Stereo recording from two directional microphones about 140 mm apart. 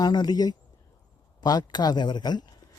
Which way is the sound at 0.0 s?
30° left (ahead or behind).